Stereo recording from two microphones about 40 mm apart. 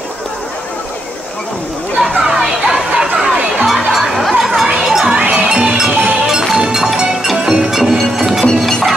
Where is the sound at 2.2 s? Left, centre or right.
Centre.